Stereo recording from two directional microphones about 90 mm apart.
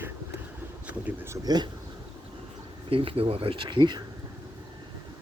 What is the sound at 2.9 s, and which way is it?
Speech, 85° right.